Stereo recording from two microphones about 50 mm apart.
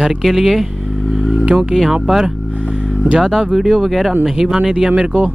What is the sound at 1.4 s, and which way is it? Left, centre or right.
Speech, centre.